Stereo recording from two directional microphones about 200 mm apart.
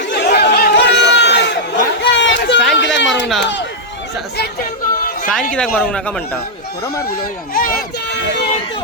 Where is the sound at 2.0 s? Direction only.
65° left (ahead or behind).